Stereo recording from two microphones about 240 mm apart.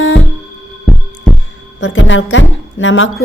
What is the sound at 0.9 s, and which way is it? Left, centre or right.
Heart sounds, centre.